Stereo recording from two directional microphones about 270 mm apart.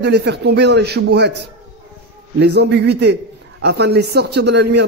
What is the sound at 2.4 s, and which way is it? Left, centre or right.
A man's voice, right.